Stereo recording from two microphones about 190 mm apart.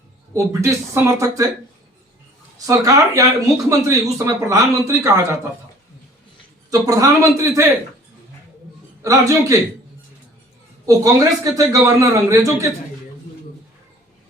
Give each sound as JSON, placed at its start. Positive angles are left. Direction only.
{"t": 0.3, "sound": "a man's voice", "side_deg": -15}
{"t": 2.6, "sound": "a man's voice", "side_deg": -15}
{"t": 6.7, "sound": "a man's voice", "side_deg": -20}
{"t": 9.0, "sound": "a man's voice", "side_deg": -15}
{"t": 10.8, "sound": "a man's voice", "side_deg": -20}